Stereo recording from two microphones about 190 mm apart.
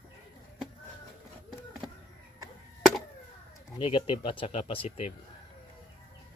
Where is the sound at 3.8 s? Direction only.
25° left (ahead or behind).